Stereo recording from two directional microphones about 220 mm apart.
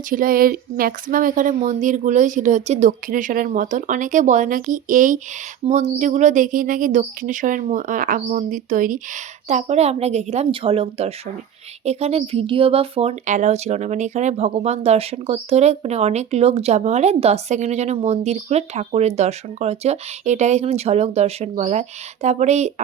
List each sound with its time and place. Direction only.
0.1 s speech: 40° right (ahead or behind)